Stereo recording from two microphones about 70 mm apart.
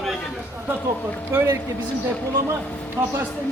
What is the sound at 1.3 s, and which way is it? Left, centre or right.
Speech, right.